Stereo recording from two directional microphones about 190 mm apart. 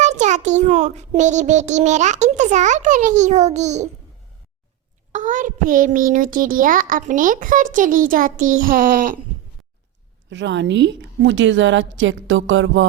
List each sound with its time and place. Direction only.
0.0 s a child's voice: 40° right (ahead or behind)
5.1 s a child's voice: 40° right (ahead or behind)
10.2 s a woman's voice: 70° right (ahead or behind); by 12.8 s 85° right